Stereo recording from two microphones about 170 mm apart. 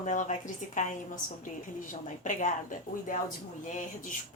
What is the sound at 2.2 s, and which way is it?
Speech, 50° left (ahead or behind).